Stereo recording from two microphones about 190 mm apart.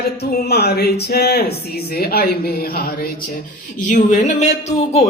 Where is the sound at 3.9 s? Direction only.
40° left (ahead or behind).